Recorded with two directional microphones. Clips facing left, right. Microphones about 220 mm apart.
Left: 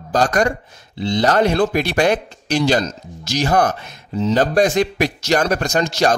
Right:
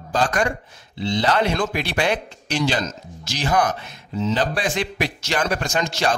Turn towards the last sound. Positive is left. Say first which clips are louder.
# left 5 dB
turn(degrees=40)  # may be behind; listen again after turning